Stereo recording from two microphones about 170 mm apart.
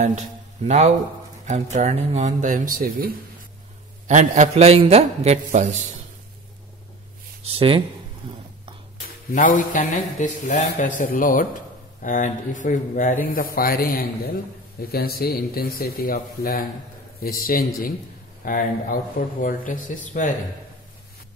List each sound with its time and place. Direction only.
0.7 s a man's voice: 40° right (ahead or behind); by 3.1 s 55° right (ahead or behind)
4.1 s a man's voice: 45° right (ahead or behind)
7.4 s a man's voice: 30° right (ahead or behind)
9.3 s speech: 50° left (ahead or behind)